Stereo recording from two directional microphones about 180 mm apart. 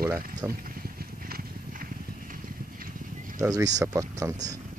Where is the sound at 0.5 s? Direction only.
55° right (ahead or behind).